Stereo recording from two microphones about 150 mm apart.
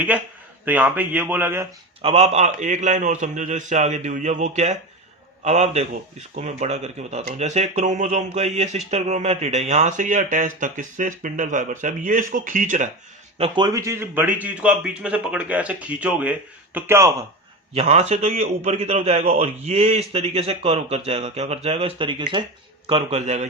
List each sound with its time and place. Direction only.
0.6 s a man's voice: 10° right (ahead or behind)
2.0 s a man's voice: 45° right (ahead or behind)
13.6 s a man's voice: 25° right (ahead or behind)
17.7 s a man's voice: 45° right (ahead or behind)